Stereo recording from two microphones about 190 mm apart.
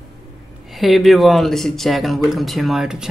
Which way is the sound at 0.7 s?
Centre (ahead or behind).